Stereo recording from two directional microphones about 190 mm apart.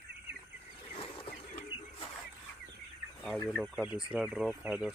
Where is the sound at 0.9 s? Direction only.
30° left (ahead or behind).